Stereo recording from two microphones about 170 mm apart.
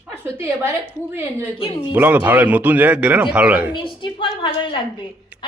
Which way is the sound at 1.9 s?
10° right (ahead or behind).